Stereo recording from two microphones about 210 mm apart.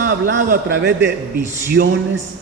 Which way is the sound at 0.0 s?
55° right (ahead or behind).